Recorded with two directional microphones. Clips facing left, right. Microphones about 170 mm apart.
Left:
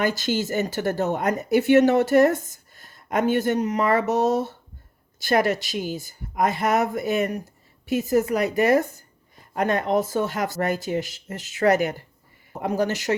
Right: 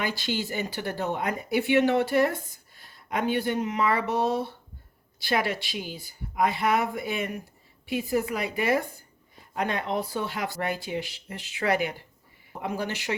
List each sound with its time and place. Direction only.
0.0 s speech: 45° left (ahead or behind)